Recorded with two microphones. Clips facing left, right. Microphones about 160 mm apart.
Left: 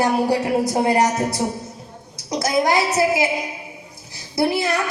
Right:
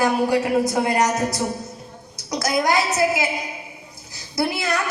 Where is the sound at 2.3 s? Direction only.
30° left (ahead or behind).